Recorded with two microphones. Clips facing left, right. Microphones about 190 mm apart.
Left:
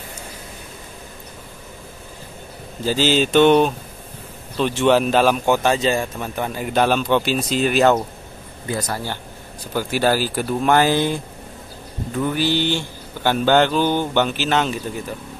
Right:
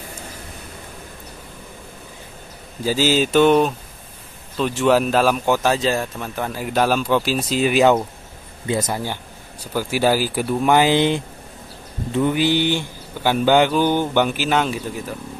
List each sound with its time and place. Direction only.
2.8 s speech: 10° right (ahead or behind)
8.6 s speech: 25° right (ahead or behind); by 10.7 s 5° right (ahead or behind)
10.7 s speech: 15° right (ahead or behind)